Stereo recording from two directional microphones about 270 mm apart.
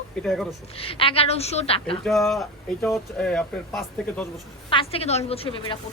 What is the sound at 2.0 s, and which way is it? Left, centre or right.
Speech, centre.